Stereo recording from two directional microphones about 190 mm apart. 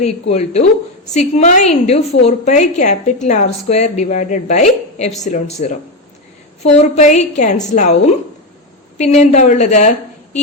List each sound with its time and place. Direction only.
0.0 s a woman's voice: 35° left (ahead or behind)